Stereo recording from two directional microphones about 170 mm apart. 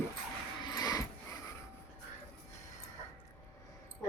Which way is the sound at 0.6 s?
20° left (ahead or behind).